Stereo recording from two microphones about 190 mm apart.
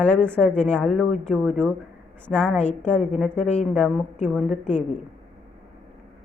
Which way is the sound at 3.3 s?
35° left (ahead or behind).